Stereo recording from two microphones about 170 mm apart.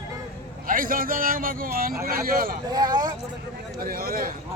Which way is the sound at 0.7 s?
55° right (ahead or behind).